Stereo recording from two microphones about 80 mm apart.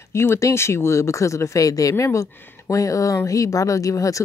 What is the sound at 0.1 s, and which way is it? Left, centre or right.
Speech, left.